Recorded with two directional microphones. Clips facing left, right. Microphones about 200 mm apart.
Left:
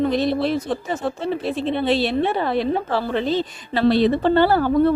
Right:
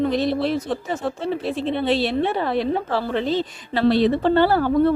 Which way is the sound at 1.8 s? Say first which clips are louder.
Left 1 dB; 20° left (ahead or behind).